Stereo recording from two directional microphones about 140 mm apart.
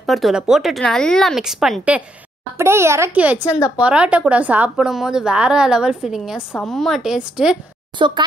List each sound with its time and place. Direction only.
0.0 s speech: centre (ahead or behind)
2.5 s a child's voice: 20° right (ahead or behind)
8.0 s a child's voice: 35° right (ahead or behind)